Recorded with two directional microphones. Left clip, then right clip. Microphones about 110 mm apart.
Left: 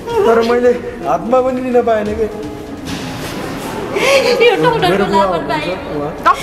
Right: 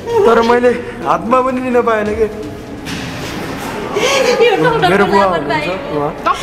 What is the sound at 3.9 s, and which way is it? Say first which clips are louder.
A woman's voice: left 1 dB; 20° left (ahead or behind).